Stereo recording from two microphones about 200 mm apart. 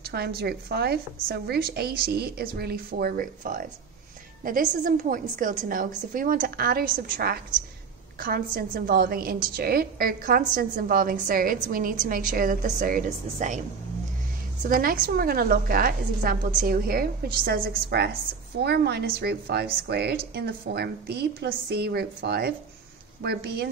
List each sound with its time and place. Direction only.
0.4 s a woman's voice: 55° right (ahead or behind)
14.7 s a woman's voice: 45° right (ahead or behind)